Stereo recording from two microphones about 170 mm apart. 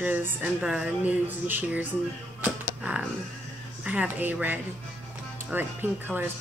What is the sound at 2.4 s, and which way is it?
Music, 10° right (ahead or behind).